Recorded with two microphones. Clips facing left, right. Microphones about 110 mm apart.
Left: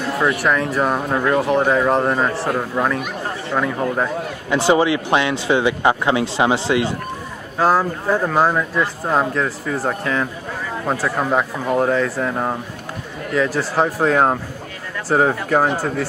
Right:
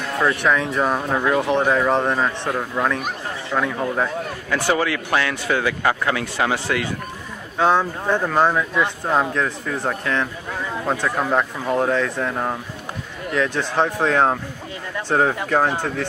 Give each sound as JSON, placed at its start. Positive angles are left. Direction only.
{"t": 0.2, "sound": "speech", "side_deg": 5}
{"t": 4.5, "sound": "speech", "side_deg": 25}
{"t": 7.5, "sound": "speech", "side_deg": 5}